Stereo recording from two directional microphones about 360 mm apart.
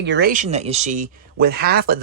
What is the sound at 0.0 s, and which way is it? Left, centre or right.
Speech, right.